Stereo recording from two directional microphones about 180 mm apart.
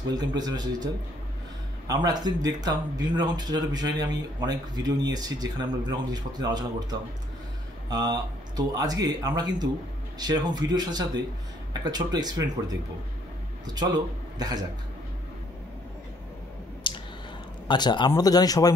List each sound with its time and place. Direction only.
0.1 s speech: 20° right (ahead or behind)
1.9 s speech: 20° right (ahead or behind)
13.7 s speech: 20° right (ahead or behind)
16.8 s a sound: 25° left (ahead or behind)
17.6 s speech: 25° left (ahead or behind)